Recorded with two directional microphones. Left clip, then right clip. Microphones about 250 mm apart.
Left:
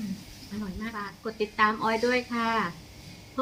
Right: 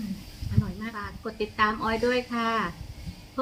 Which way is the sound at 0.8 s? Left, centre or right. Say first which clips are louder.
Even; centre.